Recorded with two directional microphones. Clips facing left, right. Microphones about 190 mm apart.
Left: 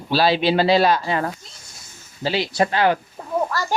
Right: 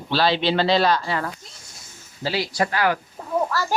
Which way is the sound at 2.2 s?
20° left (ahead or behind).